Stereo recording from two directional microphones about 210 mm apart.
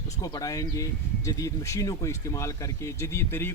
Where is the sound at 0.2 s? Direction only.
15° left (ahead or behind).